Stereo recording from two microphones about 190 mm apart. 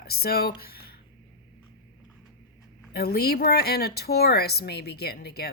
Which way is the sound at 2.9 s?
55° left (ahead or behind).